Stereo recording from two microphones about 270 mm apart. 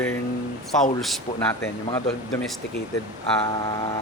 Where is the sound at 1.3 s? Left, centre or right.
Left.